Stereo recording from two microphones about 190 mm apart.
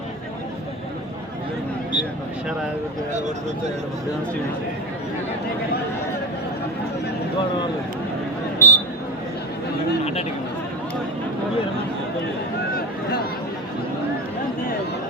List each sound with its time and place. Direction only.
3.1 s speech: 40° right (ahead or behind)
8.5 s a sound: 10° left (ahead or behind)
10.0 s speech: 35° left (ahead or behind)